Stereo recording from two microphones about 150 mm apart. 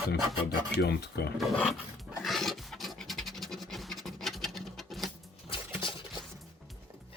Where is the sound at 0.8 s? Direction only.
90° left.